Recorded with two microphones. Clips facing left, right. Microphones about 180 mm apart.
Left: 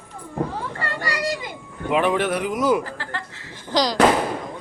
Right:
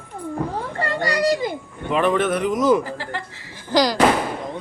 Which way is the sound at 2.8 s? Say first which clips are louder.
Right 3 dB; 15° right (ahead or behind).